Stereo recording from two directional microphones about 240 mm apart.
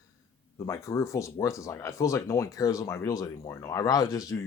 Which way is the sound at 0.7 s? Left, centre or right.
Centre.